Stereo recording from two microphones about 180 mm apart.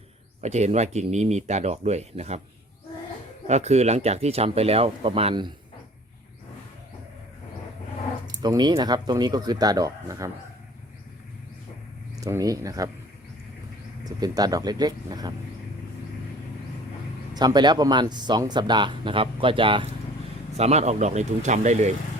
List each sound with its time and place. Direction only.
0.4 s speech: 40° right (ahead or behind)
3.4 s speech: 35° right (ahead or behind)
8.3 s speech: 25° right (ahead or behind)
12.1 s speech: 20° right (ahead or behind)
14.0 s speech: 20° right (ahead or behind)
17.3 s speech: 25° right (ahead or behind); by 21.9 s 40° right (ahead or behind)